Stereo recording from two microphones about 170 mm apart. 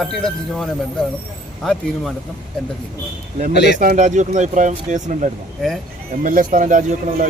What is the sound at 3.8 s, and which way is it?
Speech, 50° right (ahead or behind).